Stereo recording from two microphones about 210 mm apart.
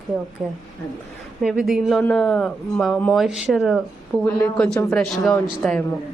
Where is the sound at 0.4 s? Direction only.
5° right (ahead or behind).